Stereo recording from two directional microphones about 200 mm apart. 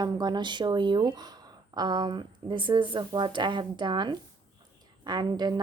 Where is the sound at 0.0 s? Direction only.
20° right (ahead or behind).